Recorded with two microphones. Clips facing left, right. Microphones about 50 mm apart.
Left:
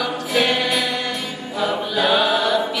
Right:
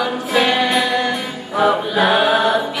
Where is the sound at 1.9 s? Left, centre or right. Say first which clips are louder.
Right 1 dB; right.